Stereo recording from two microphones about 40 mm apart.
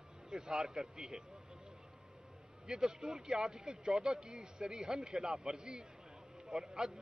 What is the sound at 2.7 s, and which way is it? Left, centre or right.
A man's voice, centre.